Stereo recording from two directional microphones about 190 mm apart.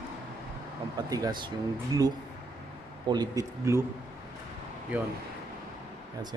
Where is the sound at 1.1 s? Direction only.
20° right (ahead or behind).